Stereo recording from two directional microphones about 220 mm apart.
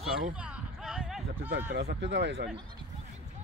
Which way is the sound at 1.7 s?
50° right (ahead or behind).